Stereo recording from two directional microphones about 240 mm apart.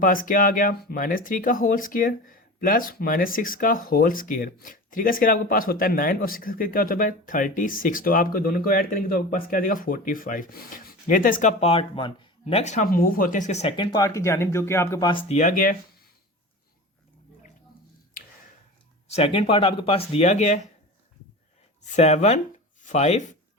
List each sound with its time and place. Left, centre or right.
0.0 s speech: left
19.0 s speech: left
21.8 s speech: left